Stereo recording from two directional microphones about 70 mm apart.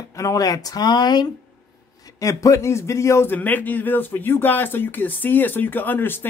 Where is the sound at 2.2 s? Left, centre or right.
Left.